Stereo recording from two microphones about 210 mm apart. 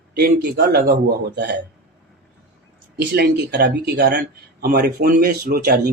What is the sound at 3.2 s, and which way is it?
Speech, 50° right (ahead or behind).